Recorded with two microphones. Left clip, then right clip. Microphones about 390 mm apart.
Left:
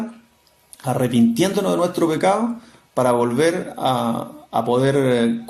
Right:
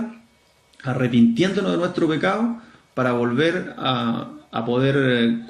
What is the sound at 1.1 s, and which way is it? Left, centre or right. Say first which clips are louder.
A man's voice: right 2 dB; centre.